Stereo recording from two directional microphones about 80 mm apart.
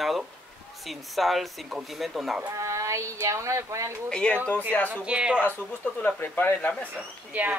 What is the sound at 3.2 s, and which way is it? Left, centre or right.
Speech, right.